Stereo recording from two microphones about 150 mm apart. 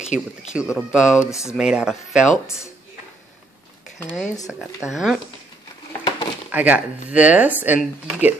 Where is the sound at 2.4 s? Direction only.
20° left (ahead or behind).